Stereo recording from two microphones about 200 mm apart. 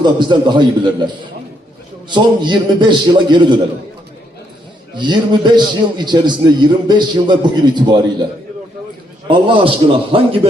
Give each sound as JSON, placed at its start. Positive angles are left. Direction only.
{"t": 0.0, "sound": "a man's voice", "side_deg": -20}
{"t": 4.9, "sound": "a man's voice", "side_deg": -20}
{"t": 9.2, "sound": "a man's voice", "side_deg": -25}